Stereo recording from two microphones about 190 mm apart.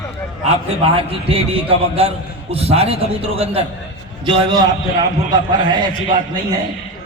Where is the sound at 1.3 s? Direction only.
30° right (ahead or behind).